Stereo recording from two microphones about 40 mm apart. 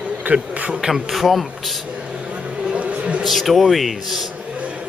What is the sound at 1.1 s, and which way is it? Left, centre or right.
Speech, centre.